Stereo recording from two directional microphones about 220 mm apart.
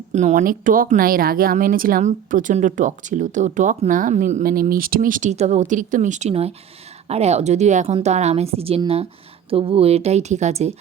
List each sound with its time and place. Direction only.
0.1 s a woman's voice: 35° right (ahead or behind)